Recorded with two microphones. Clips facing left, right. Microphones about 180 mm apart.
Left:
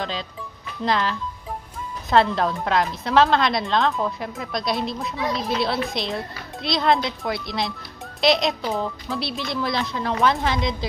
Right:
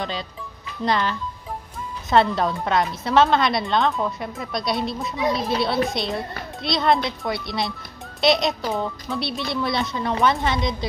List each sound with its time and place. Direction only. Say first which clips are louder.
0.8 s a woman's voice: even; centre (ahead or behind)